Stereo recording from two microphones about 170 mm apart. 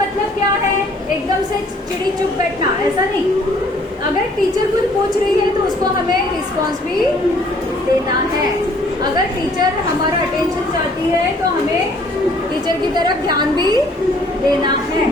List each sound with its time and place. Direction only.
13.2 s a woman's voice: 25° right (ahead or behind)